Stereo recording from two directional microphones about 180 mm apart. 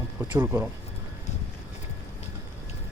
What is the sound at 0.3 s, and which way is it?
Speech, 10° right (ahead or behind).